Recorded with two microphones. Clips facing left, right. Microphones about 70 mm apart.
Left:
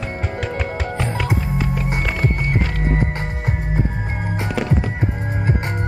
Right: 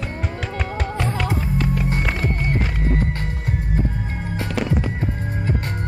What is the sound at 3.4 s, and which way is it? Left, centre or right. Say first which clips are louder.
Music: left 3 dB; left.